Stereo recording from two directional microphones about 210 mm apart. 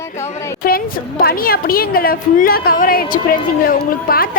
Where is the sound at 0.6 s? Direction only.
45° left (ahead or behind).